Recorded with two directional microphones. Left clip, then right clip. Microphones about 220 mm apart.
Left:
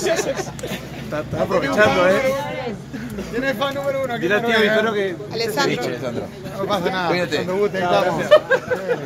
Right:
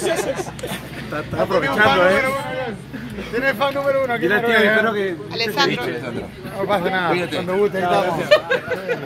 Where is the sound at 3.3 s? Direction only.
25° right (ahead or behind); by 5.1 s 45° right (ahead or behind).